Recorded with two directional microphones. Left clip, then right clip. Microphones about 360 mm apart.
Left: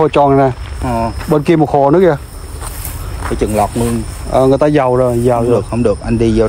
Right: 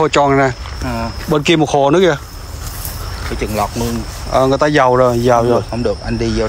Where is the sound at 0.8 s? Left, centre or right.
Left.